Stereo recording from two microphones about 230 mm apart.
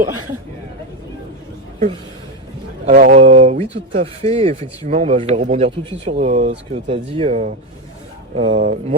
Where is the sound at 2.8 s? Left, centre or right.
Right.